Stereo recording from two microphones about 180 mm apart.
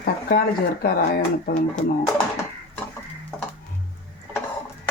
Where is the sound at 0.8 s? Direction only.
55° left (ahead or behind).